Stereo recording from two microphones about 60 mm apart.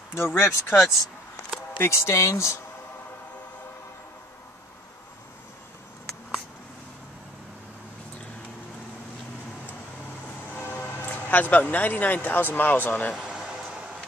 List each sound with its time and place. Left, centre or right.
0.1 s speech: left
1.8 s speech: left
10.6 s speech: left
13.1 s a sound: centre